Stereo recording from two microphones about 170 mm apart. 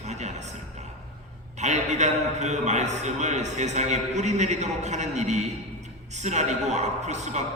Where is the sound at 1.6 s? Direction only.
45° right (ahead or behind).